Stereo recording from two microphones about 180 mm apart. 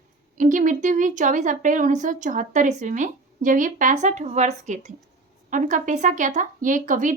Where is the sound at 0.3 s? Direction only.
45° right (ahead or behind).